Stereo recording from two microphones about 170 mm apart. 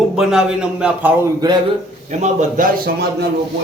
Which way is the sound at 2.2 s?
50° right (ahead or behind).